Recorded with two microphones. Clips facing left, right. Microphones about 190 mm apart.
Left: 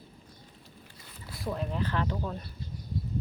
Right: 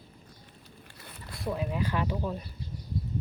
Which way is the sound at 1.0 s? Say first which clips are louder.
Right 1 dB; 60° right (ahead or behind).